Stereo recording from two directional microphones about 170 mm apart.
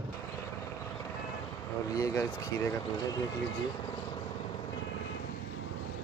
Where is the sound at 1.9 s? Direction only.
20° left (ahead or behind).